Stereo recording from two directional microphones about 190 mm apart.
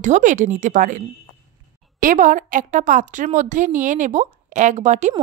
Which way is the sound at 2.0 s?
45° right (ahead or behind).